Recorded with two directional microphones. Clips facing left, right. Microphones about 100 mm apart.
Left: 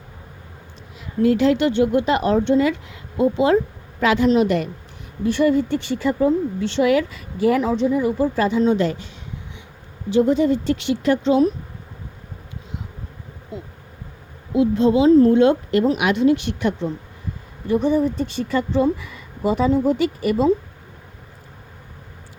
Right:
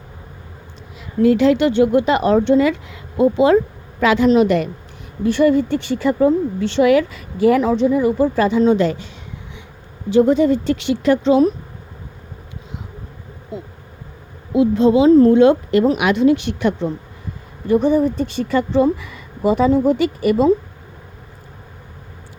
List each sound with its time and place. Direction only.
1.4 s speech: 90° right
5.2 s speech: 65° right (ahead or behind)
7.6 s speech: 60° right (ahead or behind); by 9.0 s 85° right
10.1 s speech: 55° right (ahead or behind); by 11.4 s 80° right
14.5 s speech: 90° right
17.7 s speech: 50° right (ahead or behind); by 20.5 s 70° right (ahead or behind)